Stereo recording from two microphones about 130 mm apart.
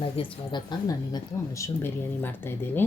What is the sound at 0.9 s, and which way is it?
A woman's voice, 25° left (ahead or behind).